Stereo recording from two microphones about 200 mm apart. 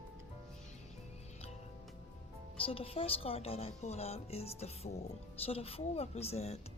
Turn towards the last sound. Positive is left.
turn(degrees=30)  # may be behind; listen again after turning